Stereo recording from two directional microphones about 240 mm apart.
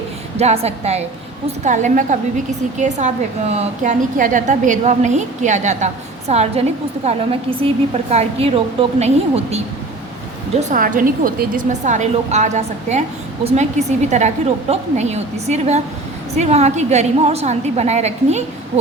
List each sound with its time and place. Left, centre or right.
0.3 s a woman's voice: right